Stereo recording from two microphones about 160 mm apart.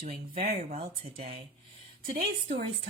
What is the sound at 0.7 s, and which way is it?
A woman's voice, 40° right (ahead or behind).